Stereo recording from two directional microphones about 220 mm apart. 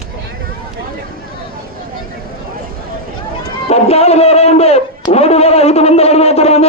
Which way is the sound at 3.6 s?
30° left (ahead or behind).